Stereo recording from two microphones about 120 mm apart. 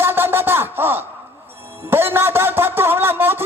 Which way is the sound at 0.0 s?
20° right (ahead or behind).